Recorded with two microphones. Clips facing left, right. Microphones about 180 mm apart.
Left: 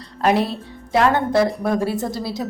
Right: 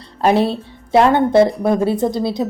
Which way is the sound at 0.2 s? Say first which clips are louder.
Right 4 dB; 30° right (ahead or behind).